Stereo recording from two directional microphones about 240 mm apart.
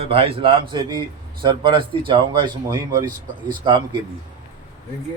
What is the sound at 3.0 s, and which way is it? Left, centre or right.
Speech, right.